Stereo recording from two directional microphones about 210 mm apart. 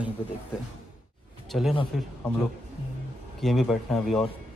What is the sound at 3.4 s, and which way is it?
Speech, centre (ahead or behind).